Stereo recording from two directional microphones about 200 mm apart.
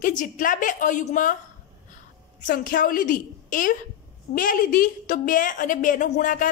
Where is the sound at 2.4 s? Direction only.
45° left (ahead or behind).